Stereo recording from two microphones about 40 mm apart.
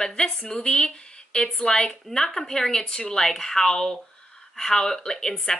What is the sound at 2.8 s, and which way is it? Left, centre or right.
Speech, left.